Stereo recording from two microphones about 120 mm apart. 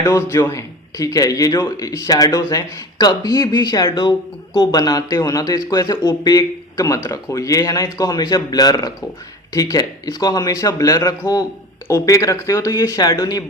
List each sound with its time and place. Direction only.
0.0 s a man's voice: 20° left (ahead or behind)